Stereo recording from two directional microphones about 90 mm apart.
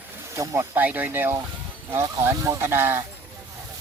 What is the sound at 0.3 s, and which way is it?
Speech, 35° right (ahead or behind).